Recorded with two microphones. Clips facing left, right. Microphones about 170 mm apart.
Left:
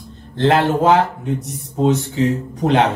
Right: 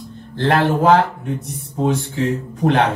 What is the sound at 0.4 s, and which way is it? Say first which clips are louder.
Speech: left 1 dB; 20° left (ahead or behind).